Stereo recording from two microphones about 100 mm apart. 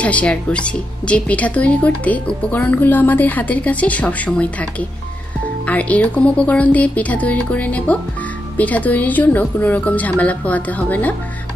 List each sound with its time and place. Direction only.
0.0 s speech: 15° left (ahead or behind)